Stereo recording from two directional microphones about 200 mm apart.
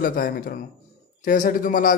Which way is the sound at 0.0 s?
45° left (ahead or behind).